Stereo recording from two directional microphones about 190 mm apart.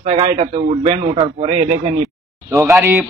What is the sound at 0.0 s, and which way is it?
A man's voice, 30° right (ahead or behind).